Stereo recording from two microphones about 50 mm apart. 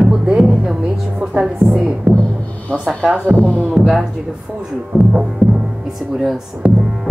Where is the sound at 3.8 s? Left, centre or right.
Centre.